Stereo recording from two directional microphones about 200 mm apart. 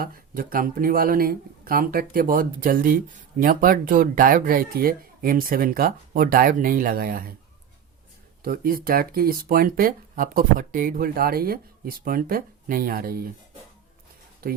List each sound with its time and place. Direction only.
0.0 s speech: 45° right (ahead or behind)
8.4 s speech: 45° right (ahead or behind)
14.4 s speech: 50° right (ahead or behind)